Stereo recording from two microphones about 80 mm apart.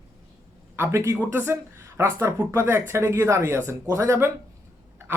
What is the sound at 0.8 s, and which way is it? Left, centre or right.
Speech, right.